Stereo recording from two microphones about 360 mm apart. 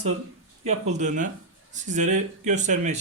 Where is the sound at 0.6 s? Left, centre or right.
Centre.